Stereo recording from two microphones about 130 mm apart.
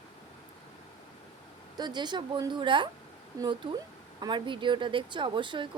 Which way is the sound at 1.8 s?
35° right (ahead or behind).